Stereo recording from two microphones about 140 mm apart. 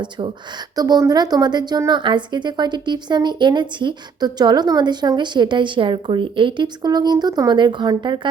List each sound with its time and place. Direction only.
0.8 s a woman's voice: 30° right (ahead or behind)